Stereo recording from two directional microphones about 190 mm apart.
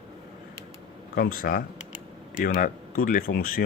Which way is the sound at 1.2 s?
50° left (ahead or behind).